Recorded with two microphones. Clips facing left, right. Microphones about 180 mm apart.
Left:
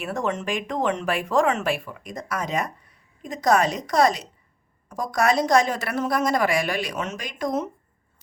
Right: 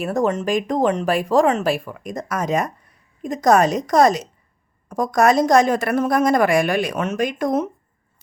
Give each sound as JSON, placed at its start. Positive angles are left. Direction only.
{"t": 0.0, "sound": "a woman's voice", "side_deg": -40}